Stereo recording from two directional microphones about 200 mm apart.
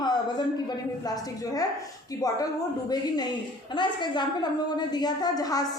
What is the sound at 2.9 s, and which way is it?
A woman's voice, 20° left (ahead or behind).